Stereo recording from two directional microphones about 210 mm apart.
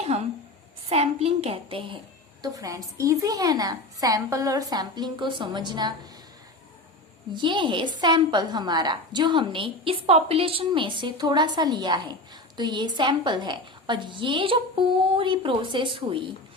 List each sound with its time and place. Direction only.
0.9 s a woman's voice: 30° right (ahead or behind)
2.4 s a woman's voice: 15° right (ahead or behind)
7.3 s a woman's voice: 20° right (ahead or behind)